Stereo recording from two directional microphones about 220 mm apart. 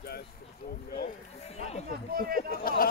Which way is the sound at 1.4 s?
30° left (ahead or behind).